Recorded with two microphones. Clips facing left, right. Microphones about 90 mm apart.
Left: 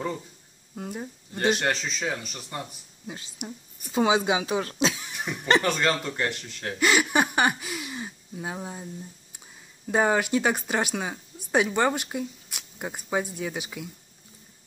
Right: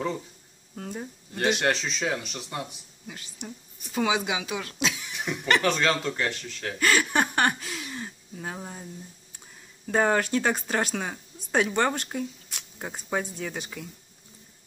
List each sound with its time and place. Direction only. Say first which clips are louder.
0.7 s speech: left 1 dB; 10° left (ahead or behind)
3.3 s a woman's voice: left 2 dB; 15° left (ahead or behind)
4.0 s speech: left 4 dB; 30° left (ahead or behind)
5.2 s speech: left 1 dB; centre (ahead or behind)
9.8 s speech: even; 10° left (ahead or behind)